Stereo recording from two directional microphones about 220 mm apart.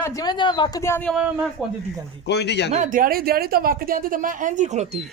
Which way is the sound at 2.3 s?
50° left (ahead or behind).